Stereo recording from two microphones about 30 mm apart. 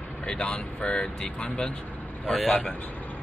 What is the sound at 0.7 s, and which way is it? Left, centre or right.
Speech, left.